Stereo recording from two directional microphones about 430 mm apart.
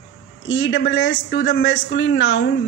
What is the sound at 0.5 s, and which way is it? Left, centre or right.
A man's voice, left.